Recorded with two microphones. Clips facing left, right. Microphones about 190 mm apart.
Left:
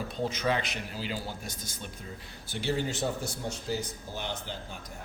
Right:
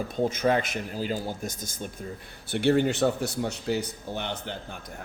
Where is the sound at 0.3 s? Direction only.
50° right (ahead or behind).